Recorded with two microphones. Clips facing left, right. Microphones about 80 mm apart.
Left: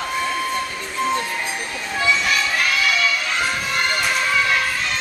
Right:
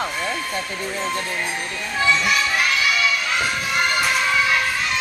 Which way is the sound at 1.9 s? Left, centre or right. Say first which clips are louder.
Right 1 dB; centre.